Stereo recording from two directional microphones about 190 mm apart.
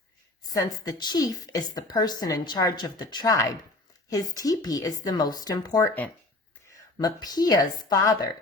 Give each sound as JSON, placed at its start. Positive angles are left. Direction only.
{"t": 0.4, "sound": "a woman's voice", "side_deg": 20}
{"t": 7.0, "sound": "a woman's voice", "side_deg": 20}